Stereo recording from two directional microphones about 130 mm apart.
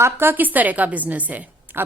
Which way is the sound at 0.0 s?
15° right (ahead or behind).